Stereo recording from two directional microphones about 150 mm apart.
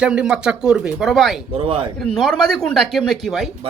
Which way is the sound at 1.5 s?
35° right (ahead or behind).